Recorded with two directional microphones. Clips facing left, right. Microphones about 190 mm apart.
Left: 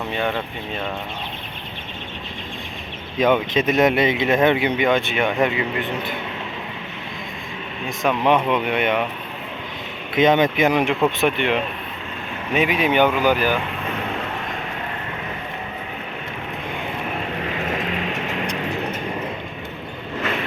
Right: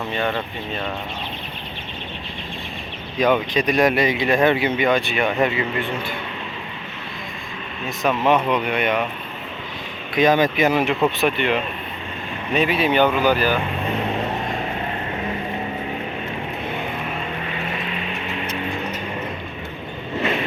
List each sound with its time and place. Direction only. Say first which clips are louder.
0.2 s speech: even; 5° left (ahead or behind)
3.2 s speech: left 1 dB; 25° left (ahead or behind)
7.9 s speech: even; centre (ahead or behind)
8.7 s speech: left 1 dB; 20° left (ahead or behind)
10.2 s speech: left 1 dB; 20° left (ahead or behind)
11.0 s speech: even; 5° right (ahead or behind)
12.5 s speech: even; 10° left (ahead or behind)
17.7 s vehicle: left 3 dB; 45° left (ahead or behind)